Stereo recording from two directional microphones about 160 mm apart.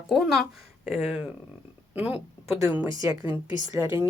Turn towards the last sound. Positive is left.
turn(degrees=-15)  # may be behind; listen again after turning